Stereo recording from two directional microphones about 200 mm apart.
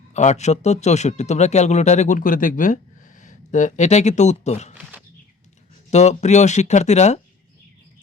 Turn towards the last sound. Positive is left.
turn(degrees=35)  # may be behind; listen again after turning